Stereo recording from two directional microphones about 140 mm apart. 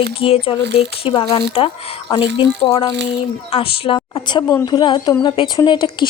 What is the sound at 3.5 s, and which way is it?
Speech, 40° left (ahead or behind).